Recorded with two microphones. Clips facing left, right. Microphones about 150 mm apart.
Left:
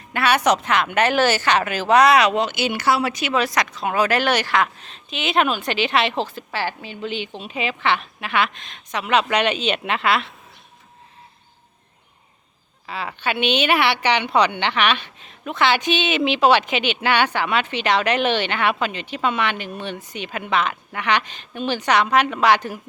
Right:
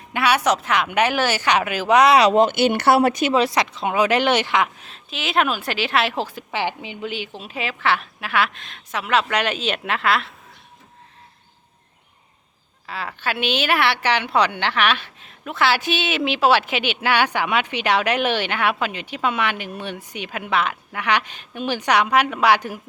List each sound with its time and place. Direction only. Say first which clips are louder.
0.1 s a woman's voice: left 1 dB; 10° right (ahead or behind)
2.1 s speech: right 3 dB; 40° right (ahead or behind)
3.3 s speech: right 2 dB; 30° right (ahead or behind); by 10.3 s centre (ahead or behind)
12.8 s a woman's voice: left 1 dB; centre (ahead or behind)